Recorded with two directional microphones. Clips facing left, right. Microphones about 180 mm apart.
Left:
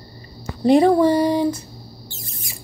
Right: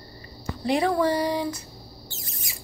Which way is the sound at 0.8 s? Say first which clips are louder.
Left 8 dB; 25° left (ahead or behind).